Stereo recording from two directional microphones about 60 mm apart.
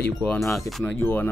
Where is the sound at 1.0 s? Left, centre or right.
Left.